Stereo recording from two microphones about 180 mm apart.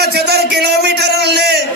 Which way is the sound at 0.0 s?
60° right (ahead or behind).